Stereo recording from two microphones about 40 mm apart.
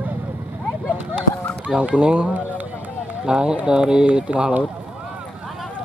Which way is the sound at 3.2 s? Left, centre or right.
Right.